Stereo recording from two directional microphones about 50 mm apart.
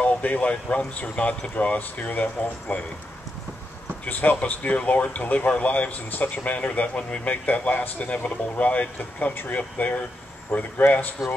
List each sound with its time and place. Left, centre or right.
0.0 s a man's voice: left
2.7 s speech: left
4.0 s a man's voice: left
8.9 s a man's voice: left